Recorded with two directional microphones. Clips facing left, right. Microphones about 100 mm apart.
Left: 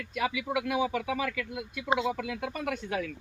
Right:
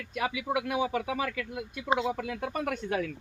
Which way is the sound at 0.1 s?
40° right (ahead or behind).